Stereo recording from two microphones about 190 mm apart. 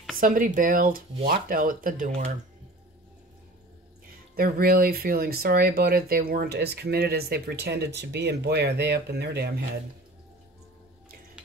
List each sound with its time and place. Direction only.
0.2 s speech: 45° right (ahead or behind)
4.4 s speech: 50° right (ahead or behind)